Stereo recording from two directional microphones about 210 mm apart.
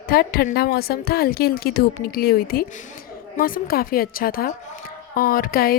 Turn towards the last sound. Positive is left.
turn(degrees=45)  # may be behind; listen again after turning